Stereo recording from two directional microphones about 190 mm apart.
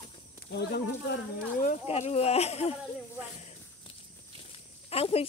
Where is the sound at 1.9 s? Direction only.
30° left (ahead or behind).